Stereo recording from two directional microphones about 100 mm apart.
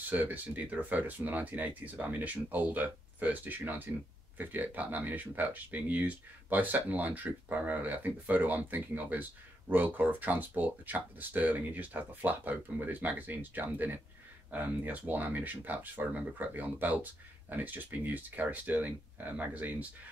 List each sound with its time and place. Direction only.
0.1 s speech: 15° right (ahead or behind)